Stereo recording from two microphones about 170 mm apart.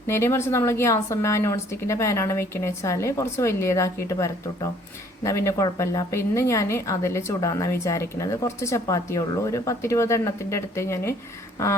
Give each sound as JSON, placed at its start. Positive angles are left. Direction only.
{"t": 0.1, "sound": "a woman's voice", "side_deg": 15}